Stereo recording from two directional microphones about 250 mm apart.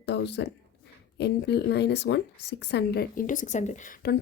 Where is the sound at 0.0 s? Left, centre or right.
Left.